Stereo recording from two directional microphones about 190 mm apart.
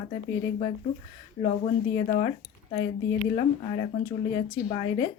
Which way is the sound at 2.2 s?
25° left (ahead or behind).